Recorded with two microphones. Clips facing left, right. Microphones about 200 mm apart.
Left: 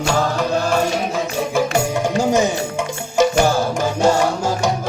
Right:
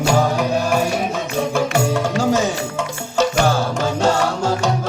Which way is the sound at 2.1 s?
15° left (ahead or behind).